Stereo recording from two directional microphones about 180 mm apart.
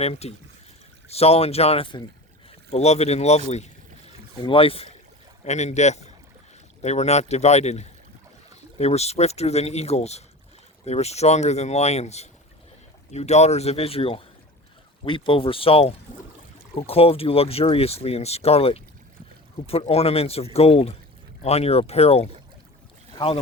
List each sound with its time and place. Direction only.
0.0 s speech: 35° left (ahead or behind)